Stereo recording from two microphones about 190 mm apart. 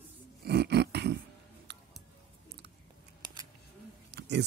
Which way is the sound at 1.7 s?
60° right (ahead or behind).